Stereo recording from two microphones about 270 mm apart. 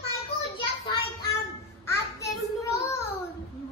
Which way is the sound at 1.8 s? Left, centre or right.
Centre.